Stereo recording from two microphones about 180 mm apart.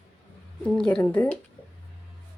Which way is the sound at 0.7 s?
5° left (ahead or behind).